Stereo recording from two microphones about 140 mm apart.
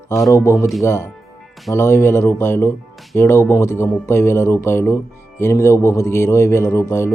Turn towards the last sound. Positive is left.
turn(degrees=20)  # may be behind; listen again after turning